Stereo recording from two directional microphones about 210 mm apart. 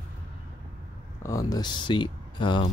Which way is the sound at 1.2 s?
15° left (ahead or behind).